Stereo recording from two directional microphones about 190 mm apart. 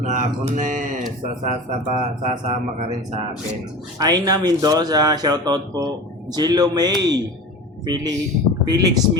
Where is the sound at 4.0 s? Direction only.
20° right (ahead or behind).